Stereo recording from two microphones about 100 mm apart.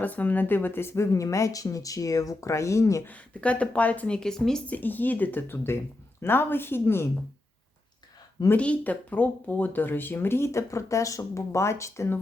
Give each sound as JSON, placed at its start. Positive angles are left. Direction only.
{"t": 0.0, "sound": "speech", "side_deg": 15}
{"t": 3.1, "sound": "speech", "side_deg": 15}
{"t": 4.6, "sound": "speech", "side_deg": 15}
{"t": 8.5, "sound": "speech", "side_deg": 15}